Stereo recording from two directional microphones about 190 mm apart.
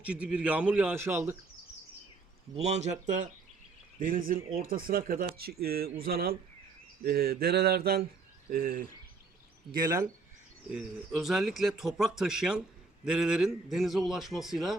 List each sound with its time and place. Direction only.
0.0 s a man's voice: 5° right (ahead or behind)
2.6 s speech: 35° right (ahead or behind); by 6.3 s 50° right (ahead or behind)
7.0 s a sound: 55° right (ahead or behind)
8.4 s speech: 50° right (ahead or behind)
9.7 s speech: 20° right (ahead or behind)
10.7 s speech: 5° right (ahead or behind)